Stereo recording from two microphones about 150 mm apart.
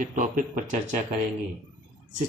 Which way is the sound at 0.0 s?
60° right (ahead or behind).